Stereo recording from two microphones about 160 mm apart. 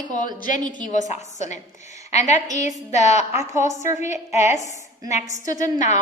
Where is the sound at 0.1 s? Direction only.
55° left (ahead or behind).